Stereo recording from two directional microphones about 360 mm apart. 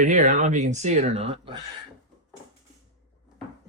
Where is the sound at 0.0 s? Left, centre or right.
Centre.